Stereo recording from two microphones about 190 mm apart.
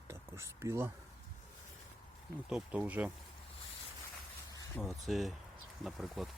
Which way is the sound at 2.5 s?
5° right (ahead or behind).